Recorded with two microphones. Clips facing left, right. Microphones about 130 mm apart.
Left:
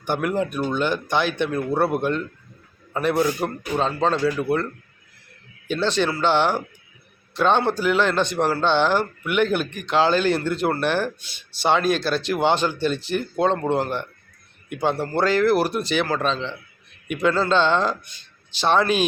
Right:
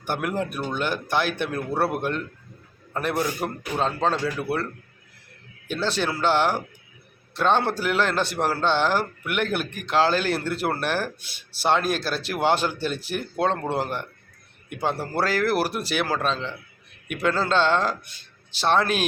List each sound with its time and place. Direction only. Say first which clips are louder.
0.0 s a man's voice: left 4 dB; 5° right (ahead or behind)